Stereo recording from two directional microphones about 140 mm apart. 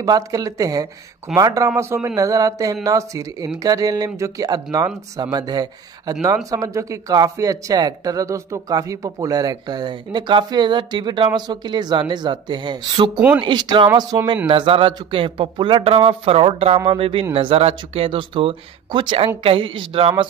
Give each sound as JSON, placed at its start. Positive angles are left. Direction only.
{"t": 0.0, "sound": "speech", "side_deg": -25}